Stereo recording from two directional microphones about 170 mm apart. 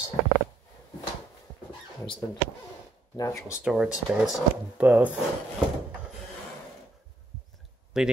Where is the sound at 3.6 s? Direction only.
5° right (ahead or behind).